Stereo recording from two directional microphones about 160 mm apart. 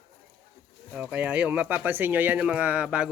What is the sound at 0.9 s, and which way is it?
A man's voice, 10° right (ahead or behind).